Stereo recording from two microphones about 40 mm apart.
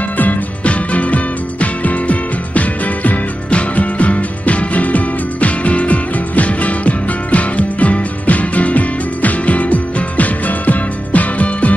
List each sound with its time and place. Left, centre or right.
0.7 s music: left